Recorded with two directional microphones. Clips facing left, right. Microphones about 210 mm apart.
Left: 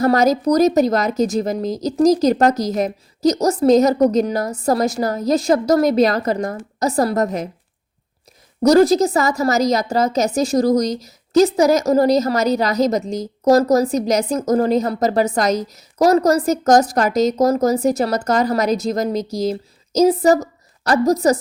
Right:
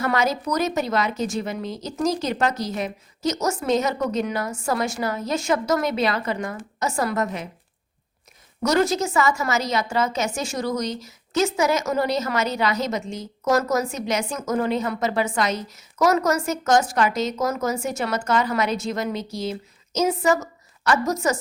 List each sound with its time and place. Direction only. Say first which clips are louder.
0.0 s a woman's voice: left 8 dB; 40° left (ahead or behind)
8.6 s a woman's voice: left 9 dB; 35° left (ahead or behind)